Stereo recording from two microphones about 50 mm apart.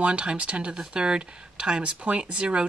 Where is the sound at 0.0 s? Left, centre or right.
Right.